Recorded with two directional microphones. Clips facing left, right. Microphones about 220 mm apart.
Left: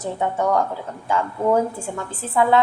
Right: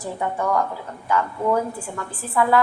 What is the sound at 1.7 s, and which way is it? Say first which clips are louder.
Speech: left 2 dB; 25° left (ahead or behind).